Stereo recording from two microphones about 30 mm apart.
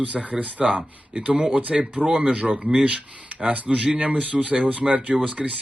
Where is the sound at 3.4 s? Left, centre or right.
Right.